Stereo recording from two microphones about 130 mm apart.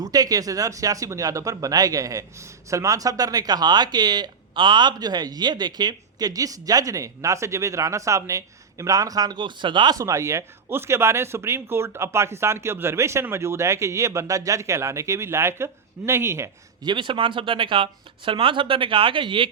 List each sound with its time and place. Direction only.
0.0 s speech: 30° right (ahead or behind)
10.0 s speech: 20° right (ahead or behind)
16.8 s speech: 35° right (ahead or behind)